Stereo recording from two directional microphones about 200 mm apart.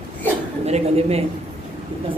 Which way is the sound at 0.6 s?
30° right (ahead or behind).